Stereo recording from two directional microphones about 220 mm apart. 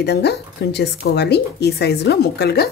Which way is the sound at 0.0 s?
50° left (ahead or behind).